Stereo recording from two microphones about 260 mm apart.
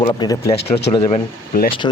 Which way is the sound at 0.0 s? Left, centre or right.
Centre.